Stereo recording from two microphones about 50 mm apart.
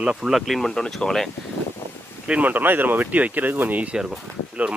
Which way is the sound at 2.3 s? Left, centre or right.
Right.